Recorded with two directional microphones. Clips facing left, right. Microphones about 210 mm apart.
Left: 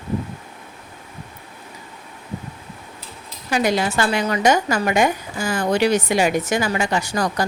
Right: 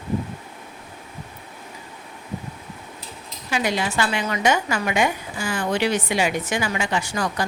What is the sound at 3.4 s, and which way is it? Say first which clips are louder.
A woman's voice: left 4 dB; 40° left (ahead or behind).